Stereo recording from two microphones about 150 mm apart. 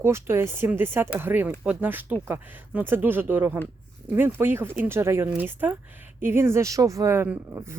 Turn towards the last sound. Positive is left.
turn(degrees=-15)  # may be behind; listen again after turning